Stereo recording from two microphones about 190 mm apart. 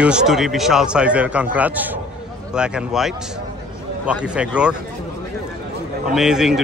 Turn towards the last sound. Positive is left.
turn(degrees=-5)  # may be behind; listen again after turning